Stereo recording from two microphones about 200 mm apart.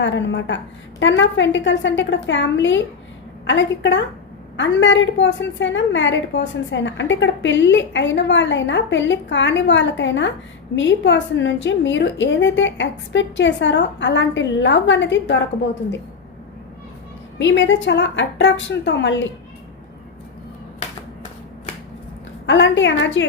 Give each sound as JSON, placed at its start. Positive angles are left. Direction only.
{"t": 0.0, "sound": "a woman's voice", "side_deg": 65}
{"t": 17.3, "sound": "a woman's voice", "side_deg": 65}
{"t": 22.4, "sound": "a woman's voice", "side_deg": 65}